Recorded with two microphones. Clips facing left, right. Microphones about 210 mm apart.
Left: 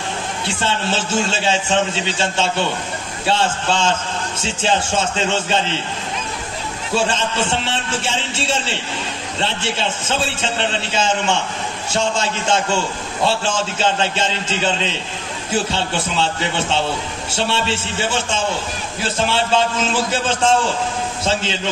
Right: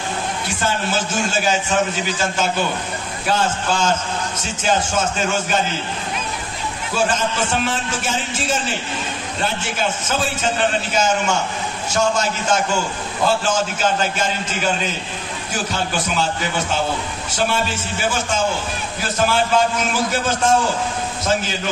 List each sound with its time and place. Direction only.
0.5 s a man's voice: 25° left (ahead or behind)
7.0 s a man's voice: 25° left (ahead or behind)